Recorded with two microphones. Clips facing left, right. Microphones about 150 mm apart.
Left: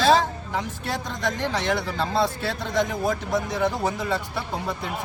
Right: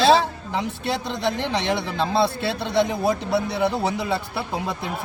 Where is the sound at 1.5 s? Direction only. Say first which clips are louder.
Right 1 dB; 20° right (ahead or behind).